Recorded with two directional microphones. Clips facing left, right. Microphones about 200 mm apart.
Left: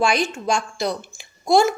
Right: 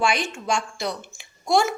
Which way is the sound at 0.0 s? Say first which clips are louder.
Left 4 dB; 35° left (ahead or behind).